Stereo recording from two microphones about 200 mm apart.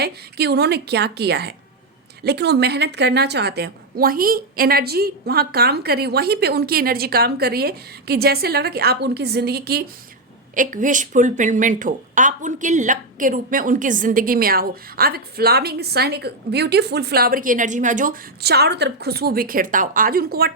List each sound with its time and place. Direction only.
0.0 s a woman's voice: 55° right (ahead or behind)
10.5 s speech: 40° right (ahead or behind)